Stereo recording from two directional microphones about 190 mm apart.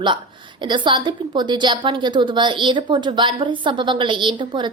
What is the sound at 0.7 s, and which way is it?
A woman's voice, 25° right (ahead or behind).